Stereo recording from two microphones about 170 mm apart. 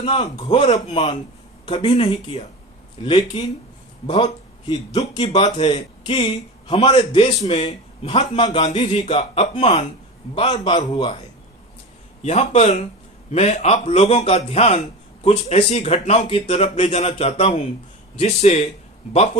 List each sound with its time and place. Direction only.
0.0 s a man's voice: 30° left (ahead or behind)
0.6 s a man's voice: 40° left (ahead or behind)
10.3 s speech: 25° left (ahead or behind)
12.2 s a man's voice: 40° left (ahead or behind)